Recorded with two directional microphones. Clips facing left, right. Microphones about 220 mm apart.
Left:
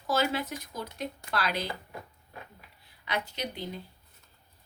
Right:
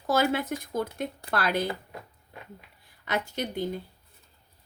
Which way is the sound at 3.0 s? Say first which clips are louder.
Right 4 dB; 45° right (ahead or behind).